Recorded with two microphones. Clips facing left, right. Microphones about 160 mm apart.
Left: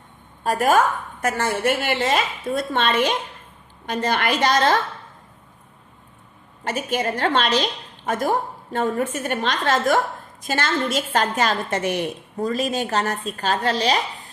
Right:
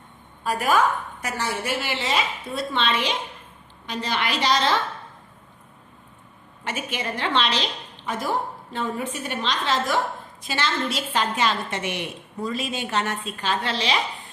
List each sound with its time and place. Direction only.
0.4 s a woman's voice: 45° left (ahead or behind)
6.7 s a woman's voice: 40° left (ahead or behind)